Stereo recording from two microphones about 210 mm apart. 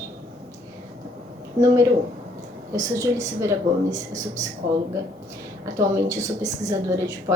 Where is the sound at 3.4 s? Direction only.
15° right (ahead or behind).